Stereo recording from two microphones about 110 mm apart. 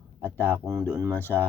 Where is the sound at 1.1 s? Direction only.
15° left (ahead or behind).